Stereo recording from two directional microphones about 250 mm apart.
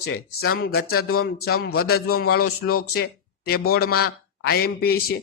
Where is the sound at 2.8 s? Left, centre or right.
Left.